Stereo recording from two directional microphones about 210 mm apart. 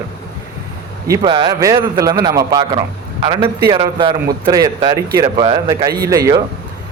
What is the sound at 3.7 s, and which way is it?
A man's voice, 25° right (ahead or behind).